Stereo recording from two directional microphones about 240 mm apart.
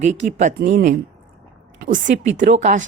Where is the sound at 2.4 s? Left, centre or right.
Right.